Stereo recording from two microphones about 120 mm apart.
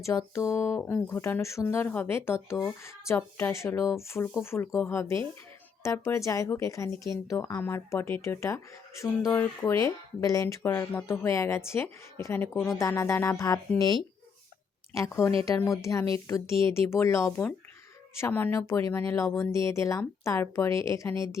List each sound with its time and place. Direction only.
0.0 s speech: 25° left (ahead or behind)